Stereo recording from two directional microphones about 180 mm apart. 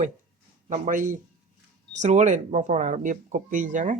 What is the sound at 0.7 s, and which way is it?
Speech, 50° right (ahead or behind).